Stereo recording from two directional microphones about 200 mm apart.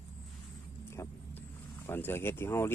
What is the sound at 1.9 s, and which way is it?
Speech, 10° left (ahead or behind).